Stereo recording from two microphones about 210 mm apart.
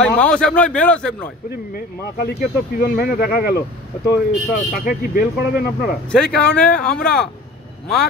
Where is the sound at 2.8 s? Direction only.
45° left (ahead or behind).